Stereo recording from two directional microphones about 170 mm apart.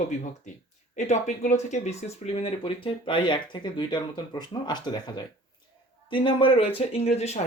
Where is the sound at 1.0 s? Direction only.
45° left (ahead or behind).